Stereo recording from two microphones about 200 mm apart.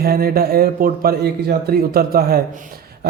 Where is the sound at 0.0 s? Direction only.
50° right (ahead or behind).